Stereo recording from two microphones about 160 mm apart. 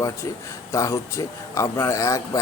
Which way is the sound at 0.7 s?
20° left (ahead or behind).